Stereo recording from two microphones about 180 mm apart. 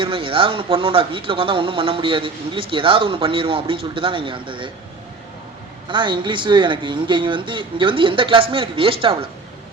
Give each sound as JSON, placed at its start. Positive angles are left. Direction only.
{"t": 0.0, "sound": "speech", "side_deg": -30}
{"t": 5.9, "sound": "speech", "side_deg": -25}